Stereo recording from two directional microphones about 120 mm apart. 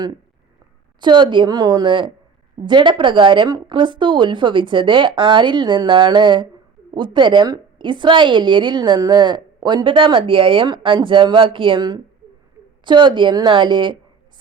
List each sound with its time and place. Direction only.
1.0 s a woman's voice: 40° right (ahead or behind)